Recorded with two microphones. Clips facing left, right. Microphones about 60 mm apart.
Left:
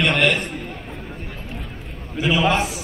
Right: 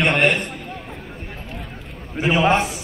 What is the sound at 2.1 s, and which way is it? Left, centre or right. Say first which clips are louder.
Speech: right 2 dB; right.